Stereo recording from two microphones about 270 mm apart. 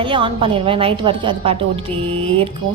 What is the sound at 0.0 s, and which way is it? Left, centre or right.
A woman's voice, centre.